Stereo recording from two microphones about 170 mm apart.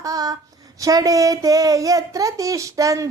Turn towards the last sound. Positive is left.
turn(degrees=-20)  # may be behind; listen again after turning